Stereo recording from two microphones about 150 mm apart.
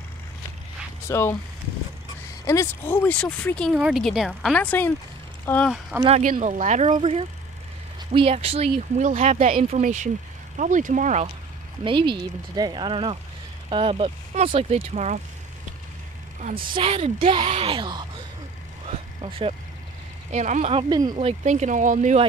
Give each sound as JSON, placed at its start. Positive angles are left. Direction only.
{"t": 1.0, "sound": "speech", "side_deg": 15}
{"t": 2.4, "sound": "speech", "side_deg": 20}
{"t": 3.7, "sound": "speech", "side_deg": -5}
{"t": 5.7, "sound": "speech", "side_deg": -5}
{"t": 6.4, "sound": "speech", "side_deg": -50}
{"t": 7.0, "sound": "speech", "side_deg": -40}
{"t": 8.7, "sound": "speech", "side_deg": -55}
{"t": 11.8, "sound": "speech", "side_deg": -30}
{"t": 16.5, "sound": "speech", "side_deg": -35}
{"t": 19.2, "sound": "speech", "side_deg": -40}
{"t": 20.2, "sound": "speech", "side_deg": -55}
{"t": 20.9, "sound": "speech", "side_deg": -25}
{"t": 21.2, "sound": "speech", "side_deg": -45}